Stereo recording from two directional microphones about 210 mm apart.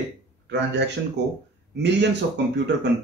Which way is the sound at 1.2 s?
55° right (ahead or behind).